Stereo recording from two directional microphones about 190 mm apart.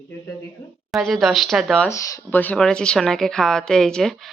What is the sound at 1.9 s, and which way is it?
Speech, 15° left (ahead or behind).